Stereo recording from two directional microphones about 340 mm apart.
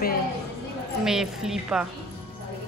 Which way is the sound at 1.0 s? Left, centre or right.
Centre.